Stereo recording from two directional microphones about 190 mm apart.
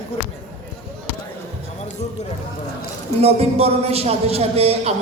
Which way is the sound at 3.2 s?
30° right (ahead or behind).